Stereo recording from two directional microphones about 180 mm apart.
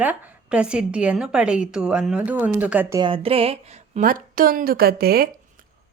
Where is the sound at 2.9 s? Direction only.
30° right (ahead or behind); by 5.2 s 60° right (ahead or behind).